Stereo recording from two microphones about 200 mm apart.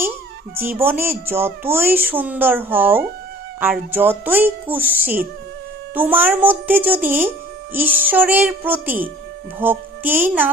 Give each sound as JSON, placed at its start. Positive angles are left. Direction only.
{"t": 0.5, "sound": "a child's voice", "side_deg": -10}
{"t": 5.0, "sound": "speech", "side_deg": -45}
{"t": 5.9, "sound": "a child's voice", "side_deg": -10}